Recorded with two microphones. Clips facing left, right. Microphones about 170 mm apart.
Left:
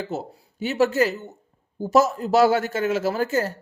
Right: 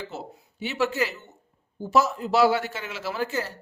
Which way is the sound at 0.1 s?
45° left (ahead or behind).